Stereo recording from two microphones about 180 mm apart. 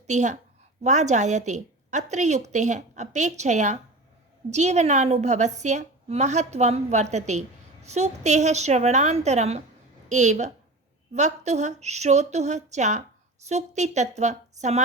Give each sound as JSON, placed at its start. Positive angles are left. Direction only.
{"t": 0.1, "sound": "a woman's voice", "side_deg": -40}